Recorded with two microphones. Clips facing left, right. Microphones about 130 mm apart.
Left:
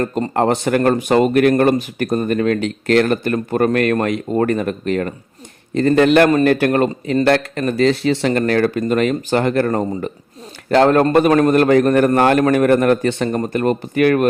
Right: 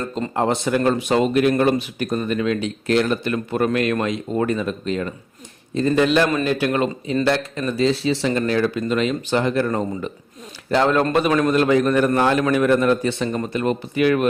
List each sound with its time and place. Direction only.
0.0 s speech: 60° left (ahead or behind)
3.3 s speech: 45° left (ahead or behind)
9.6 s speech: 45° left (ahead or behind)
10.7 s speech: 60° left (ahead or behind)
11.0 s speech: 45° left (ahead or behind)